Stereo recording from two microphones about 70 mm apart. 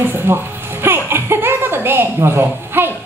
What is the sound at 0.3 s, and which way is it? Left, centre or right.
Speech, right.